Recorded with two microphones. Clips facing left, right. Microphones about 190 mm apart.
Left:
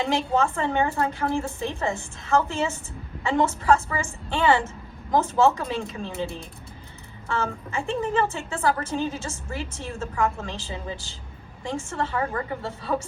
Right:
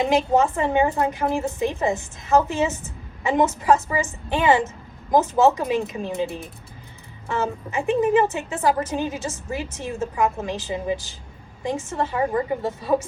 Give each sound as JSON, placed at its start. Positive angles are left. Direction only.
{"t": 0.0, "sound": "a woman's voice", "side_deg": -15}